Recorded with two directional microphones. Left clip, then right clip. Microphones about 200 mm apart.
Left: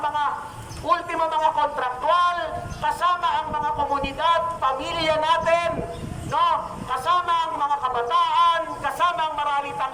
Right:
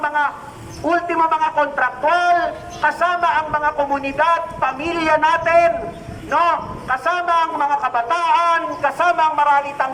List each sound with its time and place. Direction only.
0.9 s a man's voice: 55° right (ahead or behind)